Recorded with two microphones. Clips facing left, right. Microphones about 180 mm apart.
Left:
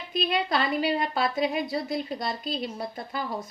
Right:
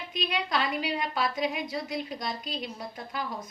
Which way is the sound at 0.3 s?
35° left (ahead or behind).